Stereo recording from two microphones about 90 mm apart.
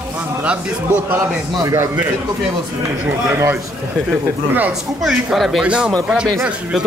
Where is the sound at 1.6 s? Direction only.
40° right (ahead or behind).